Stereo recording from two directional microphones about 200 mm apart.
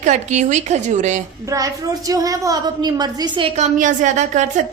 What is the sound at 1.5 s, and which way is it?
A woman's voice, 15° right (ahead or behind).